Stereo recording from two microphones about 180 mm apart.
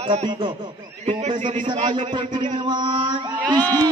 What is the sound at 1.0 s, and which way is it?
Speech, 40° right (ahead or behind).